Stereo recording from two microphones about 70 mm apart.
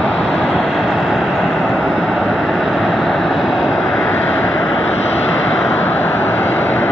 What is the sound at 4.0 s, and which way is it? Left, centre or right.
Vehicle, left.